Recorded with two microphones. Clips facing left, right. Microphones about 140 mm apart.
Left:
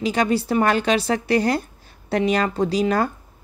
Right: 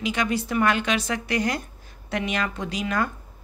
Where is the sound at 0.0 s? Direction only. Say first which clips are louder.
Left 5 dB; 35° left (ahead or behind).